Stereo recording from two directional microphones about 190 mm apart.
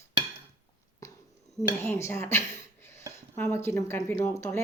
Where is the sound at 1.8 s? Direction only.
10° left (ahead or behind).